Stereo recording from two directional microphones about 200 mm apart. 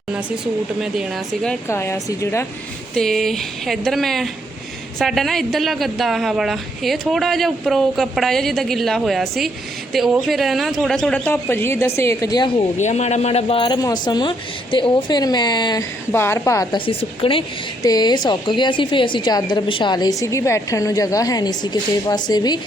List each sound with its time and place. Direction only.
1.5 s speech: 10° left (ahead or behind)
2.9 s speech: centre (ahead or behind); by 12.6 s 20° left (ahead or behind)
12.7 s a woman's voice: 35° left (ahead or behind); by 16.8 s 15° left (ahead or behind)
16.8 s a woman's voice: 25° left (ahead or behind)